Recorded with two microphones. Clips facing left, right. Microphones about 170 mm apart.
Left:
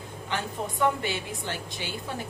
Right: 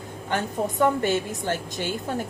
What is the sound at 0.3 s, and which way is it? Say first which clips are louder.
Speech: right 6 dB; 45° right (ahead or behind).